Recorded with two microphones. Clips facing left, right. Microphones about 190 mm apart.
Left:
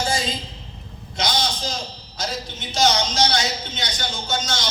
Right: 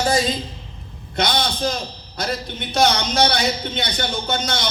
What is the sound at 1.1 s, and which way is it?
A man's voice, 60° right (ahead or behind).